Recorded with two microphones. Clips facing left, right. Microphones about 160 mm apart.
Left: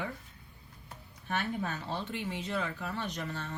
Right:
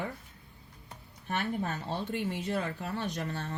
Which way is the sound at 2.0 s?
50° right (ahead or behind).